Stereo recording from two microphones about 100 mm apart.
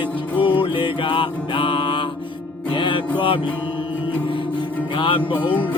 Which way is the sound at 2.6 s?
55° left (ahead or behind).